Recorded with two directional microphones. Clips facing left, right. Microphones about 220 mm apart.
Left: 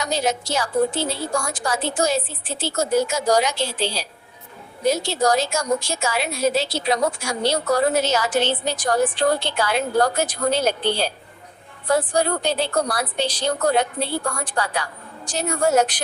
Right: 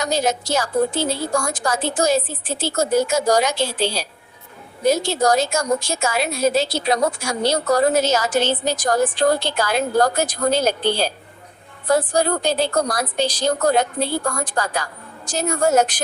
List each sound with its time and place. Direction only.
0.0 s a woman's voice: 45° right (ahead or behind)